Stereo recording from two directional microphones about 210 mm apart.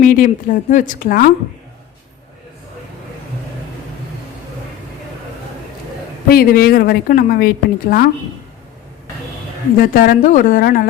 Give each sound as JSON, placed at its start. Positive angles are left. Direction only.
{"t": 0.0, "sound": "a woman's voice", "side_deg": 40}
{"t": 6.2, "sound": "a woman's voice", "side_deg": 45}
{"t": 9.7, "sound": "a woman's voice", "side_deg": 45}